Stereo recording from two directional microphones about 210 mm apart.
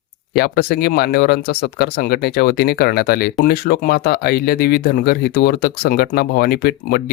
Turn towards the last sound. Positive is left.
turn(degrees=45)  # may be behind; listen again after turning